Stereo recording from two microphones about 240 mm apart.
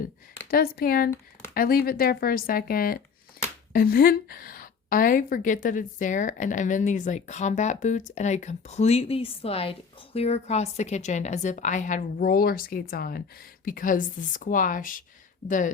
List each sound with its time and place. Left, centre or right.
0.5 s a woman's voice: left